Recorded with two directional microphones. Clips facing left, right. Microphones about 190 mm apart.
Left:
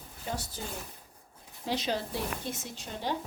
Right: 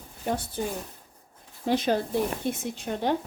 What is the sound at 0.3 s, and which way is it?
Speech, 60° right (ahead or behind).